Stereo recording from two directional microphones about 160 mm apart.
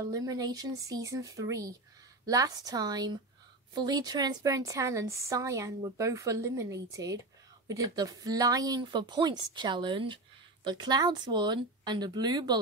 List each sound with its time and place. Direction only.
0.0 s speech: 20° right (ahead or behind)